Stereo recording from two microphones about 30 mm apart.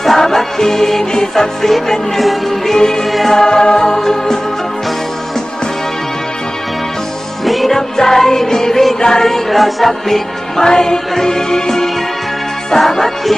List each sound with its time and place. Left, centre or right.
0.0 s music: centre
2.7 s music: left
3.1 s music: centre
3.3 s music: left
7.4 s music: centre
7.8 s music: centre
9.5 s music: centre
10.6 s music: centre
12.8 s music: centre